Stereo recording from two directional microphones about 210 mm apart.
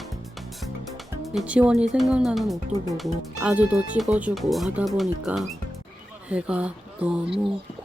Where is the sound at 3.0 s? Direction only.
5° right (ahead or behind).